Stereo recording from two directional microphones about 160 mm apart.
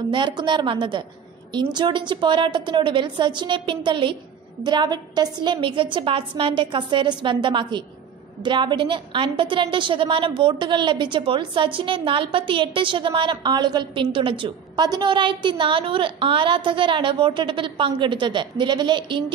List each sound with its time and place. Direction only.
0.1 s a woman's voice: 25° right (ahead or behind)